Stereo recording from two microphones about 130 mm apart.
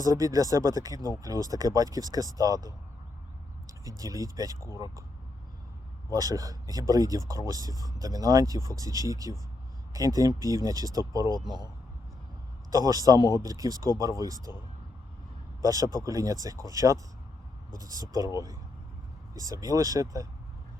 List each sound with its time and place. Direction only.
0.0 s speech: 25° right (ahead or behind)
0.9 s speech: 30° left (ahead or behind)
1.2 s speech: 30° right (ahead or behind)
6.1 s speech: 30° right (ahead or behind)
12.7 s speech: 30° right (ahead or behind)
15.6 s speech: 25° right (ahead or behind)
19.3 s speech: 25° right (ahead or behind)